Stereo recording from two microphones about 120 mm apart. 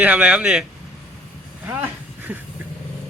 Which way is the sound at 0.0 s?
10° right (ahead or behind).